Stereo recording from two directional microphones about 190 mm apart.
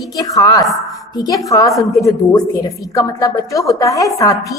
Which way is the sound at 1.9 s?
15° left (ahead or behind).